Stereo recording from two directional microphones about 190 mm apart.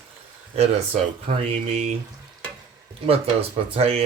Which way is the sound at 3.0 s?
30° right (ahead or behind).